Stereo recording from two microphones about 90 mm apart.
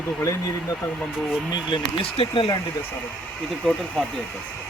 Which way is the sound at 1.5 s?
75° left (ahead or behind).